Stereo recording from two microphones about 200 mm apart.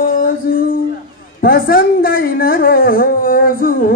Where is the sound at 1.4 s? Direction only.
50° left (ahead or behind).